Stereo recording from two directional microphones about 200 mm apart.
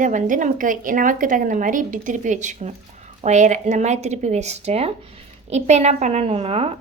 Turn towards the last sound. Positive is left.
turn(degrees=-30)  # may be behind; listen again after turning